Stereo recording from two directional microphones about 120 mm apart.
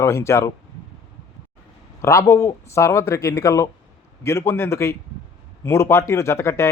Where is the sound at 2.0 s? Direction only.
25° left (ahead or behind).